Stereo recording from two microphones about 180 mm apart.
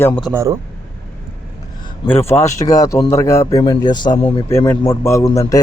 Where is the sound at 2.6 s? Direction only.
20° left (ahead or behind).